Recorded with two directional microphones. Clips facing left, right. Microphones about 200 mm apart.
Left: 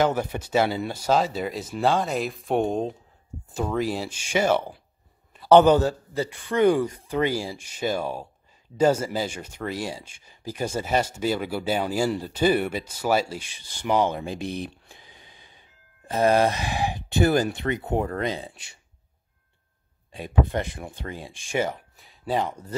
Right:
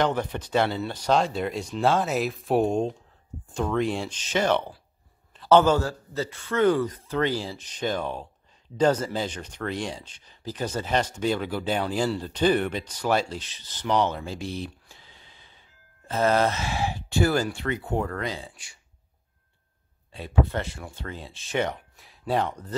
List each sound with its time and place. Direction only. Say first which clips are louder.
0.0 s speech: left 2 dB; 10° left (ahead or behind)
20.1 s speech: left 1 dB; 15° left (ahead or behind)